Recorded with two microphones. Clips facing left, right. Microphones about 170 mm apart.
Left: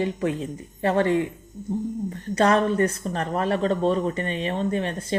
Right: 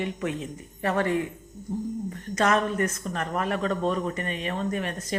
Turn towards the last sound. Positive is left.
turn(degrees=30)  # may be behind; listen again after turning